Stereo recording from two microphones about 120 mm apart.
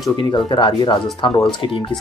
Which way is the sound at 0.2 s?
40° left (ahead or behind).